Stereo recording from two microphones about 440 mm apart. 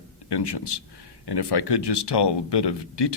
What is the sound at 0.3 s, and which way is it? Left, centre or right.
Speech, left.